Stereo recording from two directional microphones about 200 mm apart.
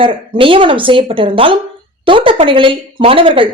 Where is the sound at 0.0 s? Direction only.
25° right (ahead or behind).